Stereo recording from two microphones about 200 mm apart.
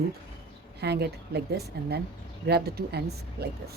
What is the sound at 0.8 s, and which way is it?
A woman's voice, 55° right (ahead or behind).